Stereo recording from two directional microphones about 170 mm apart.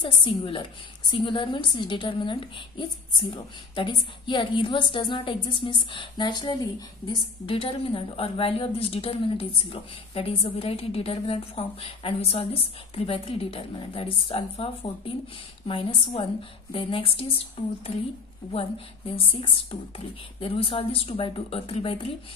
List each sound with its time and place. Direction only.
0.0 s a woman's voice: 30° left (ahead or behind)